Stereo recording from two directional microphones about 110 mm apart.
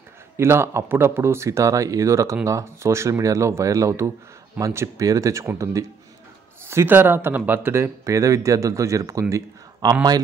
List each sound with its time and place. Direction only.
0.4 s speech: 25° right (ahead or behind)